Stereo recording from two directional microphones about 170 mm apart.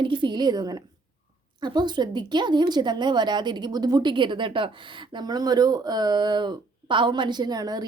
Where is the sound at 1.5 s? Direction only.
25° right (ahead or behind).